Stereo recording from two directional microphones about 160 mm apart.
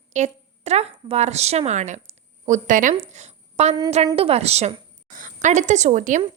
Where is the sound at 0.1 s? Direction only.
45° right (ahead or behind).